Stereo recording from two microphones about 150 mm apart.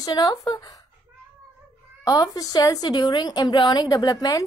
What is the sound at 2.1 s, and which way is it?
A woman's voice, 25° left (ahead or behind).